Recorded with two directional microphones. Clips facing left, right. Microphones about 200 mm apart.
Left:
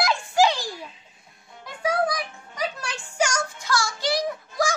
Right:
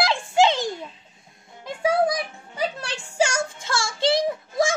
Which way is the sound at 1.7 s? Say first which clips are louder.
Right 3 dB; 25° right (ahead or behind).